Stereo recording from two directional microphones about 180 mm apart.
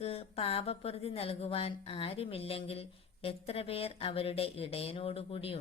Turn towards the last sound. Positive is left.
turn(degrees=30)  # may be behind; listen again after turning